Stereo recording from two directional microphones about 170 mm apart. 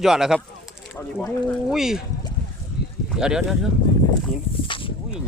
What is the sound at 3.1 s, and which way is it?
Speech, 5° right (ahead or behind).